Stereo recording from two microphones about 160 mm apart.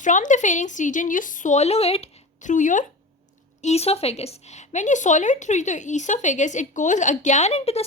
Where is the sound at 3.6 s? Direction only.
40° left (ahead or behind).